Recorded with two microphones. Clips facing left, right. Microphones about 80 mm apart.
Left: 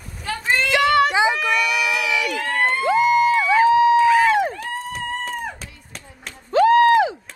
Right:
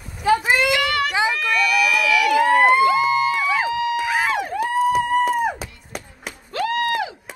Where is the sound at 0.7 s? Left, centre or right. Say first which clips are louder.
Left 4 dB; left.